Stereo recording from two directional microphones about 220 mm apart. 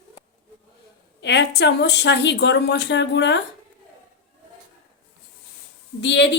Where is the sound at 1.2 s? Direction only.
50° left (ahead or behind).